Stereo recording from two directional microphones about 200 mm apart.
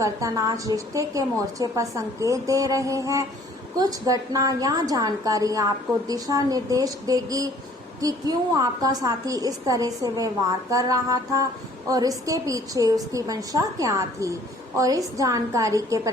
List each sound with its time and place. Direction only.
0.0 s a woman's voice: 15° right (ahead or behind)